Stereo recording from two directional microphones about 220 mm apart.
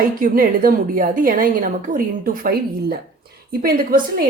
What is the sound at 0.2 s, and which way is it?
A woman's voice, 40° right (ahead or behind).